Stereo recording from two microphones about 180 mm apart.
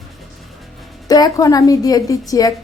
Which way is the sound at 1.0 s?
20° left (ahead or behind).